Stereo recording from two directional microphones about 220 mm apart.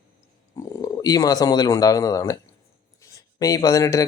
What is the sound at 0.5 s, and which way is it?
A man's voice, 15° left (ahead or behind).